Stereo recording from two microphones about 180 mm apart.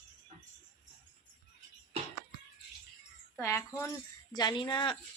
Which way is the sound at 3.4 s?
15° left (ahead or behind).